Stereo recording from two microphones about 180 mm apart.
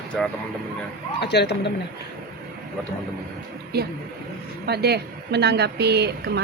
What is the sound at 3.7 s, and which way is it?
A woman's voice, 60° right (ahead or behind).